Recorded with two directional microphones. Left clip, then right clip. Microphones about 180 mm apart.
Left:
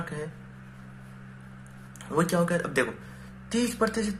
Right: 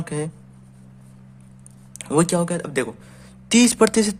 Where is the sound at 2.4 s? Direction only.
50° right (ahead or behind).